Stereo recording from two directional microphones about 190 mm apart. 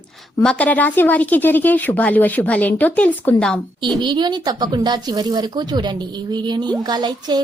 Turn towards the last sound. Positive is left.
turn(degrees=-20)  # may be behind; listen again after turning